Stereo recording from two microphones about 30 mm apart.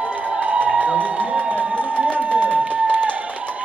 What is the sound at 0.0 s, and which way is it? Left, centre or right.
Music, right.